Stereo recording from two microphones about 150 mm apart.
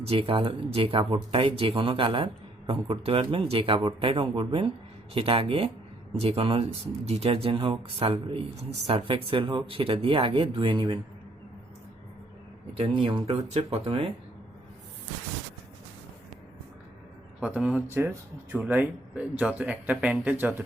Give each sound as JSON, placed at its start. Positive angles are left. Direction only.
{"t": 0.1, "sound": "speech", "side_deg": -35}
{"t": 13.0, "sound": "speech", "side_deg": -40}
{"t": 17.4, "sound": "speech", "side_deg": -10}